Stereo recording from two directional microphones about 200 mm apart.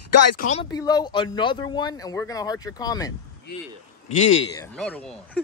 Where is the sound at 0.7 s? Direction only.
20° left (ahead or behind).